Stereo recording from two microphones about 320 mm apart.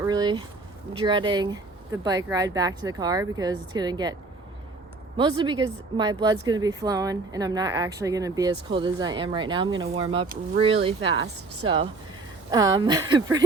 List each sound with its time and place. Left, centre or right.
0.0 s speech: centre
5.1 s speech: centre